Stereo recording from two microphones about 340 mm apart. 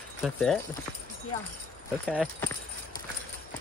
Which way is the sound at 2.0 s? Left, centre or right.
Centre.